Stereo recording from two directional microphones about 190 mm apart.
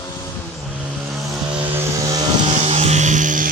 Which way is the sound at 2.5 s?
35° right (ahead or behind).